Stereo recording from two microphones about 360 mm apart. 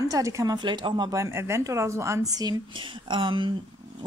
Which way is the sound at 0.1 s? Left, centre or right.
Centre.